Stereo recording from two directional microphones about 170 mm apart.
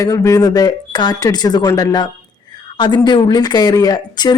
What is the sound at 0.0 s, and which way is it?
Speech, 20° left (ahead or behind).